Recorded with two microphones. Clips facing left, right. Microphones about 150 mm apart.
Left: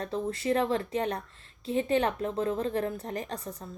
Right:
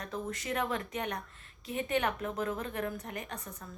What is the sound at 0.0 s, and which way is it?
A woman's voice, 30° left (ahead or behind).